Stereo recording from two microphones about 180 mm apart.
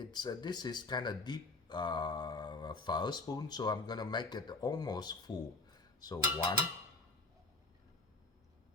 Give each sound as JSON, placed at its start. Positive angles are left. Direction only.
{"t": 0.0, "sound": "speech", "side_deg": 25}